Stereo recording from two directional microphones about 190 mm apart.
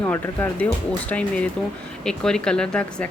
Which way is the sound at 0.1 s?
10° left (ahead or behind).